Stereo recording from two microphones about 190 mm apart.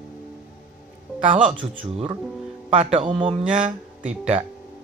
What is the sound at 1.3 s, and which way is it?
Speech, 30° right (ahead or behind).